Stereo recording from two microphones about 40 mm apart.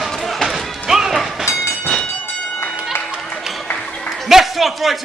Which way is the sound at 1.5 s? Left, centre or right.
Centre.